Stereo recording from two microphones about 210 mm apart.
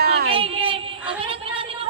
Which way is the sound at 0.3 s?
25° right (ahead or behind).